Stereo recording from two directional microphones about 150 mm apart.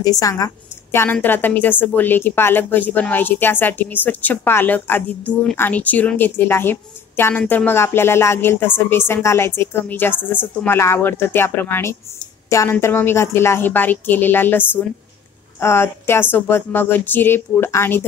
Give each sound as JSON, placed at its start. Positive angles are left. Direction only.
{"t": 0.0, "sound": "a woman's voice", "side_deg": 25}